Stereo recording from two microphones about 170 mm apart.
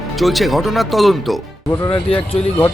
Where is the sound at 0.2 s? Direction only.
Centre (ahead or behind).